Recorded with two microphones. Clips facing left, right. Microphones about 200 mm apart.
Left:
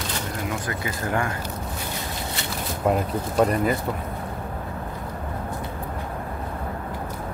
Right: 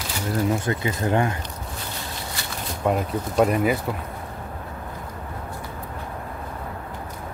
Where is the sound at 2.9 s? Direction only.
Centre (ahead or behind).